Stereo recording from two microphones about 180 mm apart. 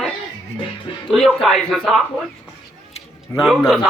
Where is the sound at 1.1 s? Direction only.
Centre (ahead or behind).